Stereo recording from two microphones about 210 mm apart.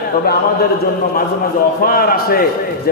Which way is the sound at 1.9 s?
45° left (ahead or behind).